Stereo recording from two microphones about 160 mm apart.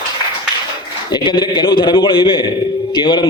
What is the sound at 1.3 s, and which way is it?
A man's voice, 30° left (ahead or behind).